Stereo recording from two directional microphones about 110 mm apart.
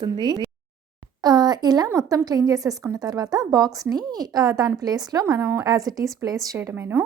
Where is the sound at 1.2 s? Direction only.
35° right (ahead or behind).